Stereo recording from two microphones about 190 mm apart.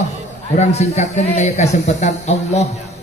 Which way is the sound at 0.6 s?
35° left (ahead or behind).